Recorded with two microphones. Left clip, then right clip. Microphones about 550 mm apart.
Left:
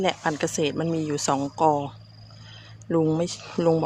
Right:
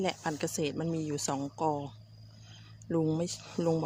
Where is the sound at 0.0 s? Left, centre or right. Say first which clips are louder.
Left 9 dB; left.